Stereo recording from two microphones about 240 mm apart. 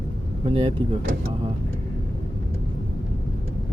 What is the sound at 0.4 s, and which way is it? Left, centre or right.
Speech, right.